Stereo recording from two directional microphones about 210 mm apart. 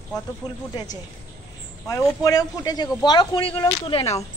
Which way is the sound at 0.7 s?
20° left (ahead or behind).